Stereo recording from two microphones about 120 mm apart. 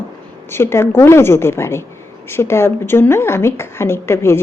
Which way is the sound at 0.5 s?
20° left (ahead or behind).